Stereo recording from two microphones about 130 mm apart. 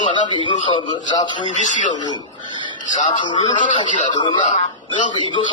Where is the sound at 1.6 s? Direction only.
70° left (ahead or behind).